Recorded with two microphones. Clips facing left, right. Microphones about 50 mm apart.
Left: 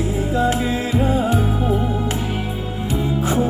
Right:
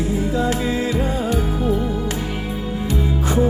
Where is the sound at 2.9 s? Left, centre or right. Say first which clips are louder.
Left 2 dB; centre.